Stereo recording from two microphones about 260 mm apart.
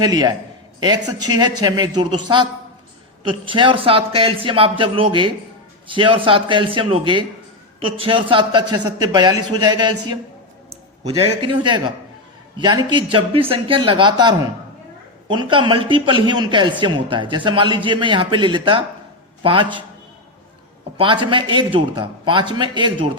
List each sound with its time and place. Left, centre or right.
0.0 s a woman's voice: centre
11.3 s a man's voice: centre
21.0 s speech: centre